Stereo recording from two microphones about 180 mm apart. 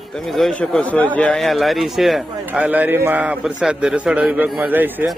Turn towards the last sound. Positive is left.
turn(degrees=-10)  # may be behind; listen again after turning